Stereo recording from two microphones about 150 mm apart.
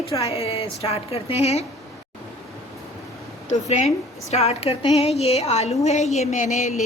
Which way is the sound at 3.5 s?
50° left (ahead or behind).